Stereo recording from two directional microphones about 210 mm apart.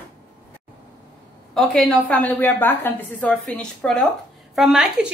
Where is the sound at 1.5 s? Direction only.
Centre (ahead or behind).